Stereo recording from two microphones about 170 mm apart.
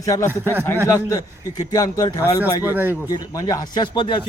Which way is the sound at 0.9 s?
20° left (ahead or behind).